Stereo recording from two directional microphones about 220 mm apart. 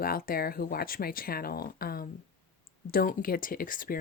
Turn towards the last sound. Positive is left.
turn(degrees=40)  # may be behind; listen again after turning